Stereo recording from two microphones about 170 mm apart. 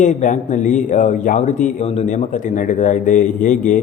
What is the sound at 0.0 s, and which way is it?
Speech, 45° left (ahead or behind).